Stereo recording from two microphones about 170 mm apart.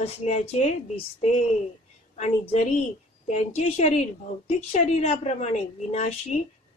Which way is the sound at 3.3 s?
40° left (ahead or behind).